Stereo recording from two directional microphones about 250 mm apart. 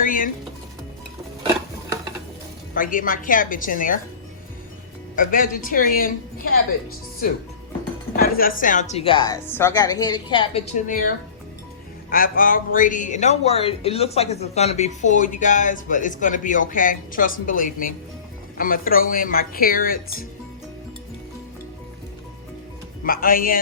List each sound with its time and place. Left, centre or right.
0.0 s music: left
2.7 s speech: left
5.1 s speech: left
8.1 s a woman's voice: left
12.1 s speech: left
23.0 s speech: left